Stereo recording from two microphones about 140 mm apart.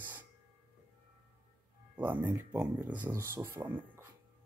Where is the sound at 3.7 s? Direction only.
15° right (ahead or behind).